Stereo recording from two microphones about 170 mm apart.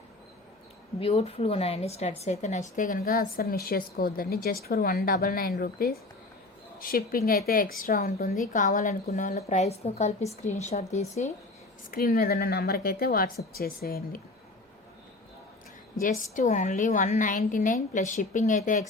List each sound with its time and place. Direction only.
0.9 s a woman's voice: 35° left (ahead or behind)
11.9 s a woman's voice: 60° left (ahead or behind)
16.0 s a woman's voice: 50° left (ahead or behind)